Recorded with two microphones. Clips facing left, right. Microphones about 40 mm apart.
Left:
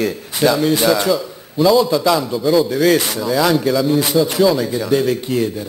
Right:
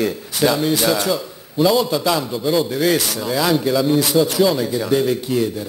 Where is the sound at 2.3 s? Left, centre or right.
Centre.